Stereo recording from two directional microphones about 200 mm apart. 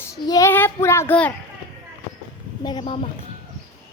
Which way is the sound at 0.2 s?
20° left (ahead or behind).